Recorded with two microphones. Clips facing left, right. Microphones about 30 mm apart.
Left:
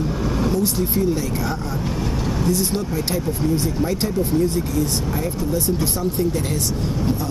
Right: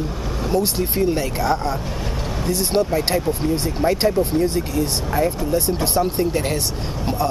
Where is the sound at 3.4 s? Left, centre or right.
Right.